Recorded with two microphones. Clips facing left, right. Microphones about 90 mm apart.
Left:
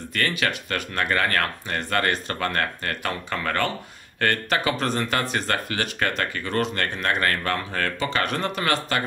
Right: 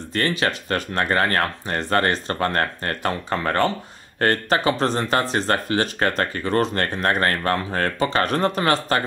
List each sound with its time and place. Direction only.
0.1 s speech: 30° right (ahead or behind)